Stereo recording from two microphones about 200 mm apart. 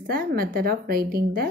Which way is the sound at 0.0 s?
50° right (ahead or behind).